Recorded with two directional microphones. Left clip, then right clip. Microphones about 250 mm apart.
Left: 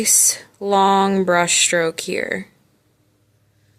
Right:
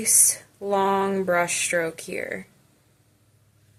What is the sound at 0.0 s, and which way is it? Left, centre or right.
Speech, left.